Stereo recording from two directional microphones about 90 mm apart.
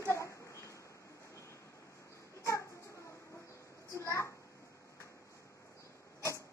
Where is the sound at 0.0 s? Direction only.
35° left (ahead or behind).